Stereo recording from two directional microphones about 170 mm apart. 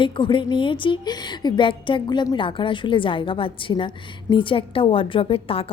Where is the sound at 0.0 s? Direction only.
30° left (ahead or behind).